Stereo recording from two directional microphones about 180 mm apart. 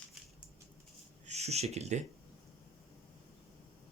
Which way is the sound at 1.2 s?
35° right (ahead or behind).